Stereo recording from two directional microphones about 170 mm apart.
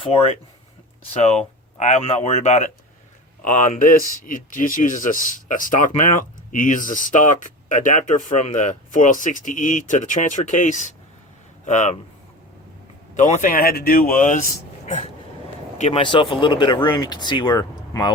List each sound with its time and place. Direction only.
0.0 s speech: 35° left (ahead or behind)
13.1 s speech: 45° left (ahead or behind)
14.8 s vehicle: 45° left (ahead or behind)
15.8 s speech: 35° left (ahead or behind)